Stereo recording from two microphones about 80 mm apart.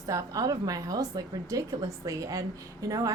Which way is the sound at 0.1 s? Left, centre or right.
Right.